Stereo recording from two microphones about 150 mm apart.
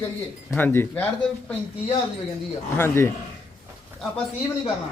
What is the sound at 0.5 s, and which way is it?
Speech, 15° left (ahead or behind).